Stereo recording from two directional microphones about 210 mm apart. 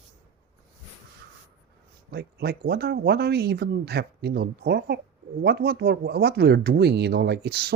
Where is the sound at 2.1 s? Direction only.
50° right (ahead or behind).